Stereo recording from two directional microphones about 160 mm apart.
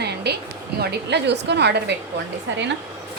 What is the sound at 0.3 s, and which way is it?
A woman's voice, 90° right.